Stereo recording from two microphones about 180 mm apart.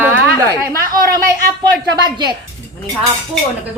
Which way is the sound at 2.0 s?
25° right (ahead or behind).